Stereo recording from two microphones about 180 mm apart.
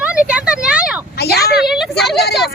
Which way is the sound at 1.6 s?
Centre (ahead or behind).